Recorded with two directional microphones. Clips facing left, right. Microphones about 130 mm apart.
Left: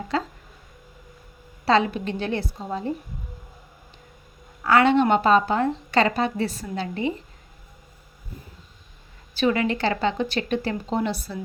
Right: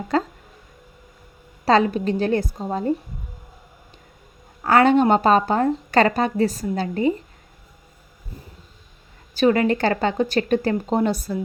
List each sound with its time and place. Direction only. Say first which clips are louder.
0.1 s speech: right 5 dB; 45° right (ahead or behind)
1.6 s a woman's voice: right 3 dB; 40° right (ahead or behind)
4.6 s a woman's voice: right 2 dB; 45° right (ahead or behind)
9.3 s speech: right 5 dB; 45° right (ahead or behind)